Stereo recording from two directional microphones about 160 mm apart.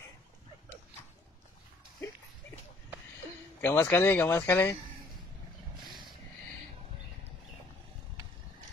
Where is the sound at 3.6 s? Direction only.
15° left (ahead or behind).